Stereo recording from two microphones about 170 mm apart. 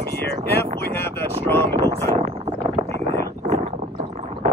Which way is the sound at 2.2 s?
40° right (ahead or behind).